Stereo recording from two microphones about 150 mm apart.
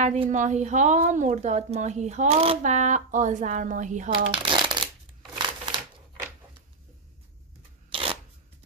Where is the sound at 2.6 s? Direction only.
55° right (ahead or behind).